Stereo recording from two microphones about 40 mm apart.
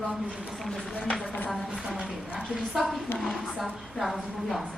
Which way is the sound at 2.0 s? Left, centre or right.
Right.